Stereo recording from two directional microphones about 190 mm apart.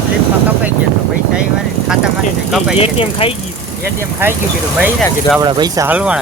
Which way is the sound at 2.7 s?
30° left (ahead or behind).